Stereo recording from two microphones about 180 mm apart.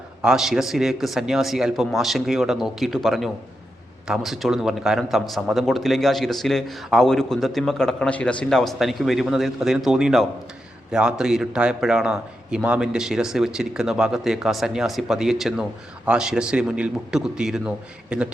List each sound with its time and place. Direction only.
0.2 s speech: 5° right (ahead or behind)